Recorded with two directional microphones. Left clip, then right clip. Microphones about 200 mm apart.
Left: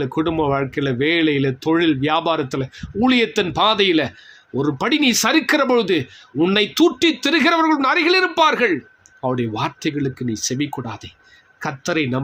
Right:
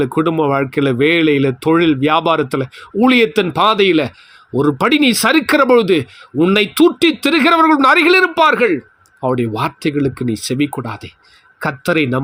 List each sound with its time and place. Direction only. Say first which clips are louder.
0.0 s speech: right 5 dB; 25° right (ahead or behind)